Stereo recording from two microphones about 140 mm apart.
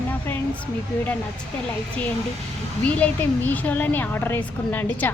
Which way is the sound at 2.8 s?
10° left (ahead or behind).